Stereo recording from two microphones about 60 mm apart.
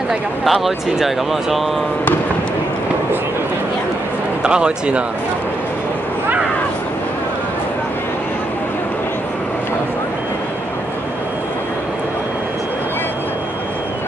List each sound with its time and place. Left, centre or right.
0.5 s speech: centre
4.4 s speech: centre